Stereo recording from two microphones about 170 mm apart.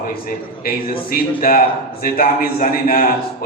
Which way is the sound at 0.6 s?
60° left (ahead or behind).